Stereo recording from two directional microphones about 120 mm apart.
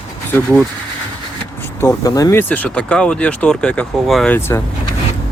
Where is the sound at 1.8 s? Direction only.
30° left (ahead or behind).